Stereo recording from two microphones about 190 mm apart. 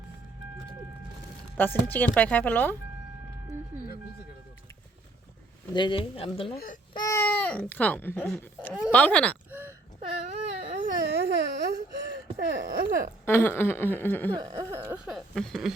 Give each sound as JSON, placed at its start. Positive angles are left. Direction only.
{"t": 1.5, "sound": "speech", "side_deg": 10}
{"t": 5.7, "sound": "speech", "side_deg": 25}
{"t": 6.9, "sound": "speech", "side_deg": 15}
{"t": 9.5, "sound": "a sound", "side_deg": -10}
{"t": 10.0, "sound": "baby cry", "side_deg": -30}
{"t": 10.7, "sound": "a sound", "side_deg": -45}
{"t": 13.2, "sound": "speech", "side_deg": 10}
{"t": 14.3, "sound": "speech", "side_deg": -20}